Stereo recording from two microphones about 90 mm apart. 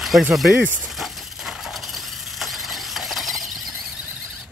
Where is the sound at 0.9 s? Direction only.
5° right (ahead or behind).